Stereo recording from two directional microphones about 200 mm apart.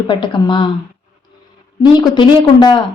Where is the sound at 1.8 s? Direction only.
20° left (ahead or behind).